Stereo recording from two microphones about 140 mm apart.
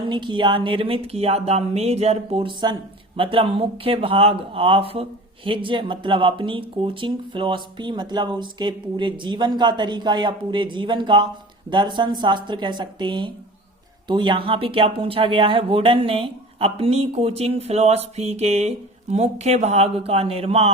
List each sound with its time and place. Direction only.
0.0 s speech: 35° right (ahead or behind)